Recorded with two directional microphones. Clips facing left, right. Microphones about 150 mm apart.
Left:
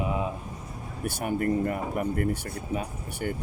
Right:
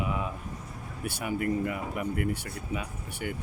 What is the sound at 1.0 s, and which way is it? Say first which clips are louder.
Speech: left 3 dB; 45° left (ahead or behind).